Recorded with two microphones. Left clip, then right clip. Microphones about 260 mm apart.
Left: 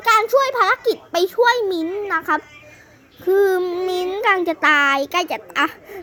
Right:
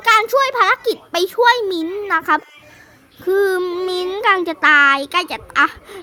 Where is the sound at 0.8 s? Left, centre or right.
Right.